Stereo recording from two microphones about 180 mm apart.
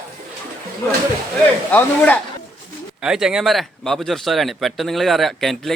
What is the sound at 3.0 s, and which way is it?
Speech, 5° right (ahead or behind).